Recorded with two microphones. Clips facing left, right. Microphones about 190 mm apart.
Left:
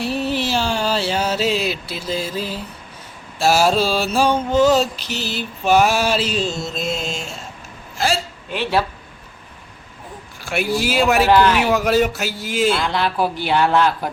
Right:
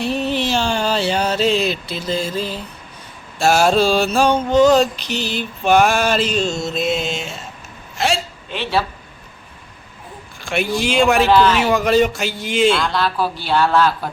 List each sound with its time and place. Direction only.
0.0 s mantra: 5° left (ahead or behind)
3.3 s a man's voice: 5° left (ahead or behind)
5.6 s mantra: 5° left (ahead or behind)
7.9 s a woman's voice: centre (ahead or behind)
8.4 s a man's voice: 10° left (ahead or behind)
10.4 s a man's voice: 5° left (ahead or behind)
12.9 s a man's voice: 15° left (ahead or behind)